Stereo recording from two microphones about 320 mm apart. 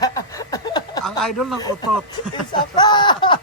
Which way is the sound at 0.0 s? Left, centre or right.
Centre.